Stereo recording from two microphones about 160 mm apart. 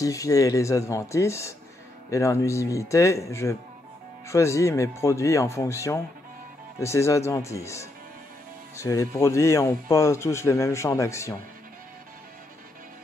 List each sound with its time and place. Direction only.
0.0 s a man's voice: 20° left (ahead or behind)